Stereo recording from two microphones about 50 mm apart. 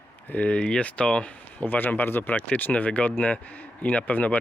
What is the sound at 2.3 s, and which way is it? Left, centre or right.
Speech, left.